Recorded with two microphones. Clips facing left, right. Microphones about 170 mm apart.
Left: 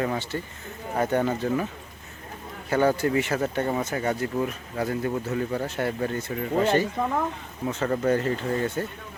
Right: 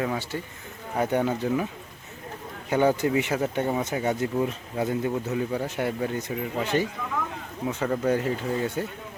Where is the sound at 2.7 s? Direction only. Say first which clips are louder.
Even; 15° right (ahead or behind).